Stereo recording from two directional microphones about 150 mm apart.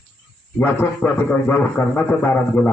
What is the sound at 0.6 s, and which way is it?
A man's voice, 15° left (ahead or behind).